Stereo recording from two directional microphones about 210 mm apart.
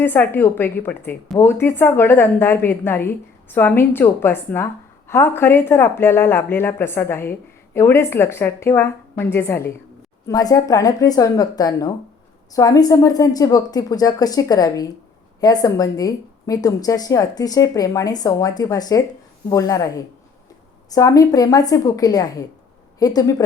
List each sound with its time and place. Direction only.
0.0 s a woman's voice: 10° left (ahead or behind)
20.9 s a woman's voice: 15° left (ahead or behind)